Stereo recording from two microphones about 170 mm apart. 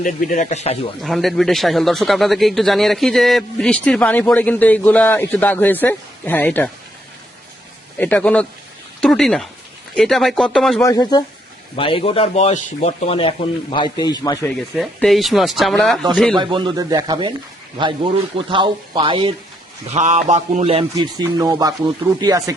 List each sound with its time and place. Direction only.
0.0 s speech: 50° left (ahead or behind)
1.0 s speech: centre (ahead or behind)
7.9 s speech: 10° left (ahead or behind)
10.8 s speech: 20° left (ahead or behind)
11.8 s a man's voice: 30° left (ahead or behind)
14.8 s speech: centre (ahead or behind)
16.4 s speech: 30° right (ahead or behind)
18.3 s speech: 30° right (ahead or behind)
19.9 s speech: 45° right (ahead or behind); by 22.5 s 20° right (ahead or behind)